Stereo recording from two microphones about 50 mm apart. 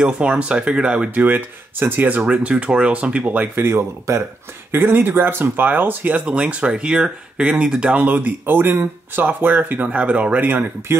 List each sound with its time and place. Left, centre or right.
0.0 s speech: right
1.1 s speech: right
2.3 s speech: right
3.5 s speech: right
4.7 s speech: right
6.2 s speech: right
8.0 s speech: right